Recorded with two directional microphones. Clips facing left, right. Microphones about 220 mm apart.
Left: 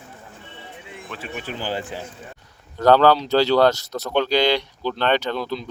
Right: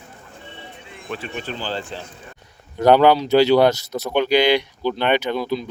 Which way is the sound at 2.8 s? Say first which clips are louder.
Right 1 dB; 15° right (ahead or behind).